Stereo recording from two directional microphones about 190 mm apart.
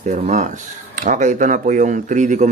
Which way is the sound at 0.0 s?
40° right (ahead or behind).